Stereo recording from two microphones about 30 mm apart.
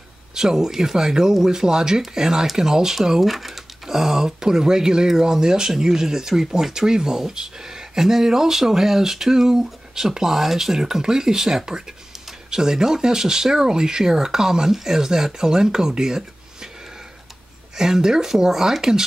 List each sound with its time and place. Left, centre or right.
0.3 s speech: centre
17.7 s speech: centre